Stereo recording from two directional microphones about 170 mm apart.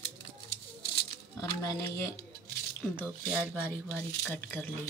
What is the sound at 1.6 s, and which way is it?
Speech, 15° left (ahead or behind).